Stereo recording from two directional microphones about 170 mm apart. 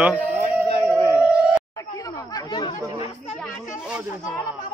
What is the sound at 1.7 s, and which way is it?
Chatter, 20° left (ahead or behind).